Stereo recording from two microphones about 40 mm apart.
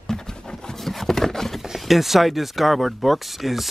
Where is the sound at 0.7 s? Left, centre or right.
Centre.